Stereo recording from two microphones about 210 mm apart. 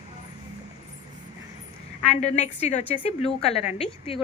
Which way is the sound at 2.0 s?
35° left (ahead or behind).